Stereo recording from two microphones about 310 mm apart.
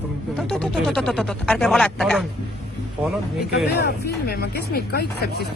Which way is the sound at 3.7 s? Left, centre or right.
Left.